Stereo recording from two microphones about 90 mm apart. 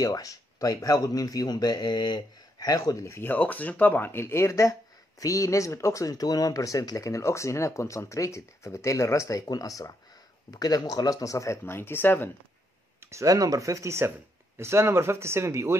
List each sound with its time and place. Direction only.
0.0 s speech: 40° left (ahead or behind); by 12.3 s 25° left (ahead or behind)
13.0 s speech: 35° right (ahead or behind)